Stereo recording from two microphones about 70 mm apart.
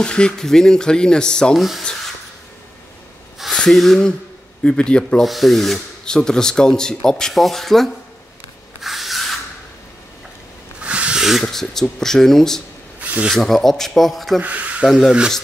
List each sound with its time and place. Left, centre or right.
0.0 s speech: centre
1.6 s speech: centre
3.5 s speech: centre
4.6 s speech: centre
5.2 s speech: centre
8.8 s rub: centre
10.8 s a sound: centre
11.4 s speech: centre
13.0 s a sound: right
13.3 s speech: centre
14.4 s speech: right
14.9 s speech: centre